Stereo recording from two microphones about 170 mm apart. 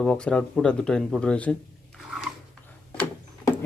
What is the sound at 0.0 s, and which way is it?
Speech, 5° left (ahead or behind).